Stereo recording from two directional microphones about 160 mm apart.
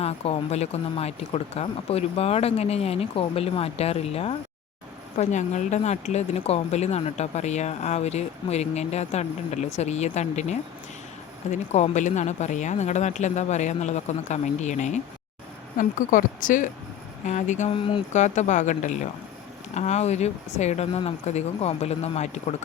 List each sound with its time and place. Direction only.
0.0 s speech: 40° left (ahead or behind)
17.7 s speech: 30° left (ahead or behind)
18.1 s speech: 45° left (ahead or behind)